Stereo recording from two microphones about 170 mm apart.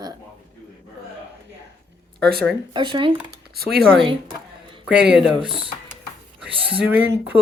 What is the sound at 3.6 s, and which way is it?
Speech, 65° right (ahead or behind).